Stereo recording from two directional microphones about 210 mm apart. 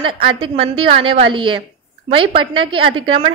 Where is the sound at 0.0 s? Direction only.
25° right (ahead or behind).